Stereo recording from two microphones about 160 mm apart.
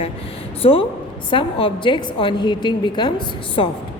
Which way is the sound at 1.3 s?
35° left (ahead or behind).